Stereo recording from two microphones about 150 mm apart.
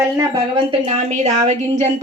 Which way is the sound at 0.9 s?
50° right (ahead or behind).